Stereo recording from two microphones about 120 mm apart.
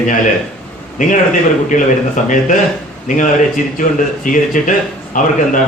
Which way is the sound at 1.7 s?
90° left.